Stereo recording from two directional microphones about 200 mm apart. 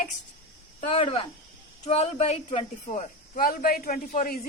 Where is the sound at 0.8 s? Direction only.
30° left (ahead or behind).